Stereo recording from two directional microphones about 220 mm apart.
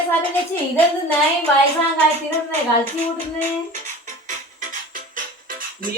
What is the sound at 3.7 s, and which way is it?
Music, 35° right (ahead or behind).